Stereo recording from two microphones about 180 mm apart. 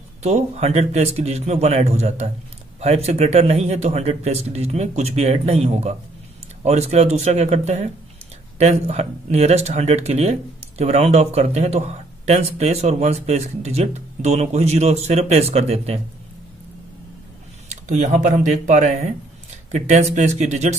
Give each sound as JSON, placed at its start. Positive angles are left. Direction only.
{"t": 0.2, "sound": "speech", "side_deg": -35}
{"t": 17.6, "sound": "speech", "side_deg": -40}